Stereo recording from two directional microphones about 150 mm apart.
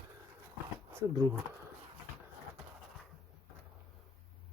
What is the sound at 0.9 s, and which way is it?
Speech, 25° right (ahead or behind).